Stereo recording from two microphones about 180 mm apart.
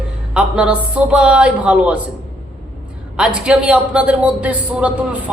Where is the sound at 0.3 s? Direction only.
5° right (ahead or behind).